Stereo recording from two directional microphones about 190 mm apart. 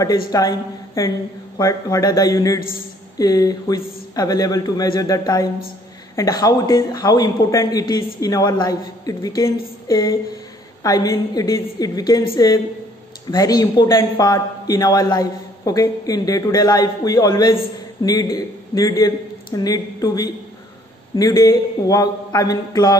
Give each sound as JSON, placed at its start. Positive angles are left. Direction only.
{"t": 0.3, "sound": "a man's voice", "side_deg": 20}
{"t": 9.8, "sound": "a sound", "side_deg": 20}
{"t": 10.8, "sound": "a man's voice", "side_deg": 20}